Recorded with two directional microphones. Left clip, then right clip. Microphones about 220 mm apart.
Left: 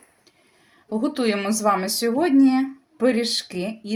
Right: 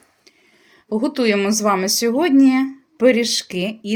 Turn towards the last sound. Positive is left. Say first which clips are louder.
# right 4 dB
turn(degrees=-35)  # may be behind; listen again after turning